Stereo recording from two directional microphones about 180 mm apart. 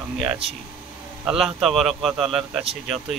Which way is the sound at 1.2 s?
Centre (ahead or behind).